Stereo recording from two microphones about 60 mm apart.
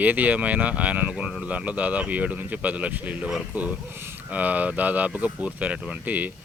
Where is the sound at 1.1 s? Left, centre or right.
Centre.